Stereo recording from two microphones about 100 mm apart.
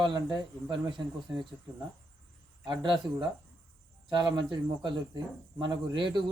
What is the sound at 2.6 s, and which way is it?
Speech, 50° right (ahead or behind).